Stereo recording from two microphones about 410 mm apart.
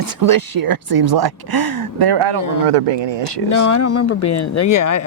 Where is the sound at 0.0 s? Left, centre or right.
Right.